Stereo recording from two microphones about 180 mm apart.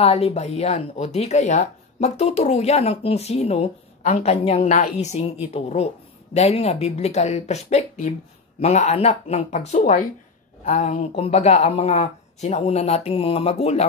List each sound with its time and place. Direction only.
0.0 s speech: 35° left (ahead or behind)